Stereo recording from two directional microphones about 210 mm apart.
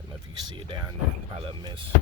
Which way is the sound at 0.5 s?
20° right (ahead or behind).